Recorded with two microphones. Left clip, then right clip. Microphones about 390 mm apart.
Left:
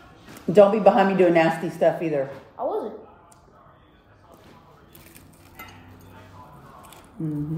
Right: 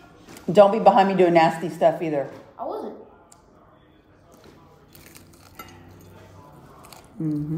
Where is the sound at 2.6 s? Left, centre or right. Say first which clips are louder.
Left 4 dB; centre.